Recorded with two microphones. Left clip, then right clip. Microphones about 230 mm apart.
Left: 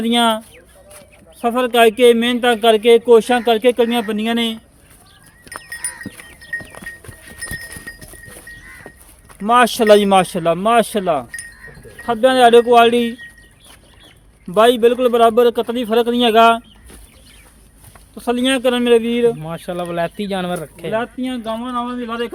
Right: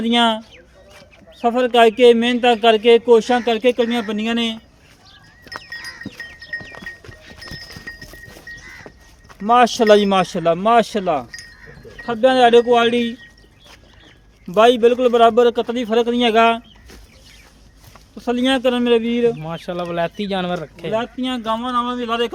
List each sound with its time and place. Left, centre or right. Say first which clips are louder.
0.0 s speech: left 1 dB; left
6.7 s music: left 1 dB; left
8.9 s a sound: left 2 dB; left
9.4 s speech: left 1 dB; left
14.5 s speech: left 1 dB; left
18.1 s speech: left 1 dB; centre
21.0 s speech: even; centre